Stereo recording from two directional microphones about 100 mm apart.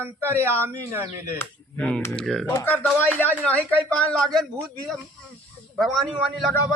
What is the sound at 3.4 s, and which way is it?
Speech, 15° left (ahead or behind).